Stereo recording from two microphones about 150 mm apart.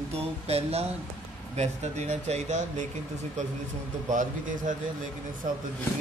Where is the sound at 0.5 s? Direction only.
40° right (ahead or behind).